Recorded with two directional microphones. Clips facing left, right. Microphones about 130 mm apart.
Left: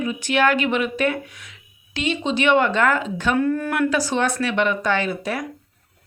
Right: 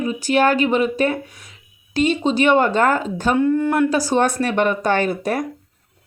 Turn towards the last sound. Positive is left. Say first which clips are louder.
# right 4 dB
turn(degrees=-45)  # may be behind; listen again after turning